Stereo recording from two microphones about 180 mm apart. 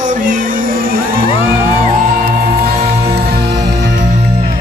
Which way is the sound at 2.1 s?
60° right (ahead or behind).